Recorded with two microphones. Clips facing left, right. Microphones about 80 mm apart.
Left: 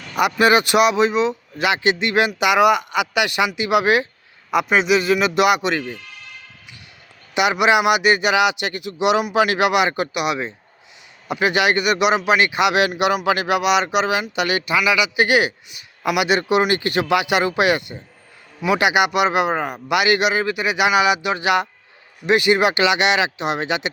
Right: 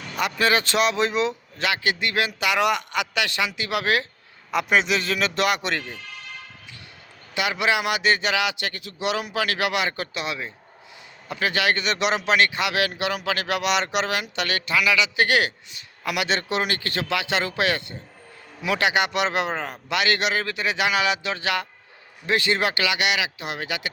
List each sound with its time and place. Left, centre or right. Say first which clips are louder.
0.2 s speech: left 6 dB; centre
1.6 s speech: left 6 dB; left
4.5 s speech: left 5 dB; centre
7.3 s a man's voice: left 7 dB; centre